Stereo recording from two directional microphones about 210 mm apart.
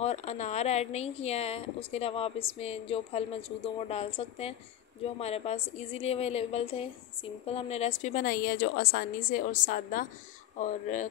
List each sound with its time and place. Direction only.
0.0 s a woman's voice: 30° left (ahead or behind)